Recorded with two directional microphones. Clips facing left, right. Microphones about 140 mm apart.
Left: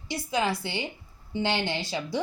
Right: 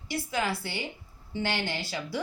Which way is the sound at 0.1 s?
20° left (ahead or behind).